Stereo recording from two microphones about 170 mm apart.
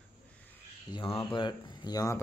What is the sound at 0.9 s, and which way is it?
Speech, 30° left (ahead or behind).